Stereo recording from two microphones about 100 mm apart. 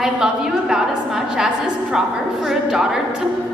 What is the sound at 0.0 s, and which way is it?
A woman's voice, 5° right (ahead or behind).